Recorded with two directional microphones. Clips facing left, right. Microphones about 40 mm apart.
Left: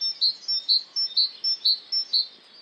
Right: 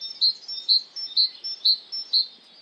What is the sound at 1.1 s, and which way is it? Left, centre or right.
Chirp, right.